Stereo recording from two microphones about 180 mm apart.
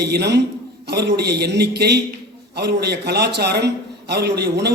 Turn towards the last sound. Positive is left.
turn(degrees=-65)  # may be behind; listen again after turning